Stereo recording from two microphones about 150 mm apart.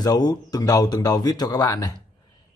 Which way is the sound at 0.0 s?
25° left (ahead or behind).